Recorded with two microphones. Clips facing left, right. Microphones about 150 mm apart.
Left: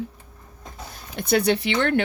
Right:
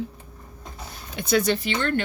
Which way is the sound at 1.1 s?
60° left (ahead or behind).